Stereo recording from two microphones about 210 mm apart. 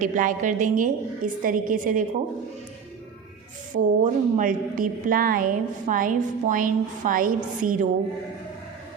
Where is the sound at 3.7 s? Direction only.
35° right (ahead or behind).